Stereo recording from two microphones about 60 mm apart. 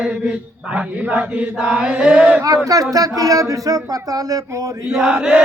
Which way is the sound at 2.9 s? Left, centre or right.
Right.